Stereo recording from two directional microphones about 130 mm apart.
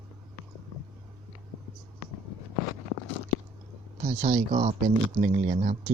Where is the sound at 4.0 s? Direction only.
70° right (ahead or behind).